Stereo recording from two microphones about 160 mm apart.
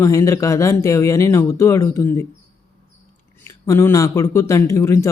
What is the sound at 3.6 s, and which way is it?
Speech, 20° left (ahead or behind).